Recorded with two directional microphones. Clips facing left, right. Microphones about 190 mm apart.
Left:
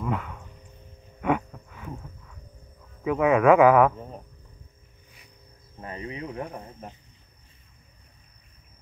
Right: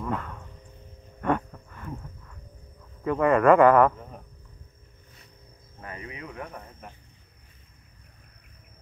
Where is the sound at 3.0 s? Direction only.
5° left (ahead or behind).